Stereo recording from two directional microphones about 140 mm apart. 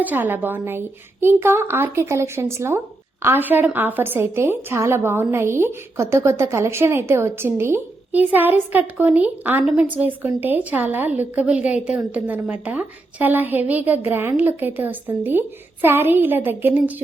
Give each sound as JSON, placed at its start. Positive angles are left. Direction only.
{"t": 0.0, "sound": "a woman's voice", "side_deg": -10}